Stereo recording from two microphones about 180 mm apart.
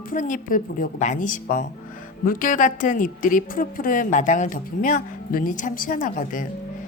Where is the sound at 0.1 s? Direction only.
50° left (ahead or behind).